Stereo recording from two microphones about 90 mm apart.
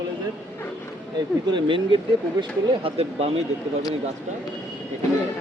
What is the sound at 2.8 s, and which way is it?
Speech, 90° right.